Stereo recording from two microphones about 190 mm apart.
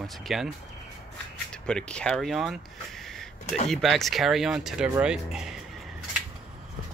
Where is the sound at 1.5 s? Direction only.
5° left (ahead or behind).